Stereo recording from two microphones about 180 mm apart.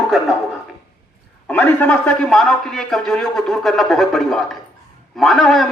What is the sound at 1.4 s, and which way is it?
A man's voice, 5° left (ahead or behind).